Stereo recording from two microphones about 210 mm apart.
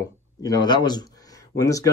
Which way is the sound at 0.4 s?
20° left (ahead or behind).